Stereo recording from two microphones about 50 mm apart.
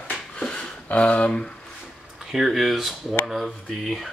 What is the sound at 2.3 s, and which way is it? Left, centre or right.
Speech, centre.